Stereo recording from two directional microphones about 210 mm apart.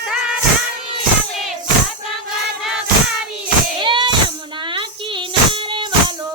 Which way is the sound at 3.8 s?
20° right (ahead or behind).